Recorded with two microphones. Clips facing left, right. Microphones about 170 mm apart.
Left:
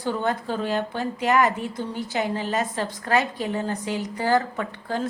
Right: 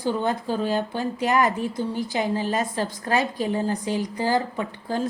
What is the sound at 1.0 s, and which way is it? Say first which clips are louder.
Speech: left 1 dB; 30° right (ahead or behind).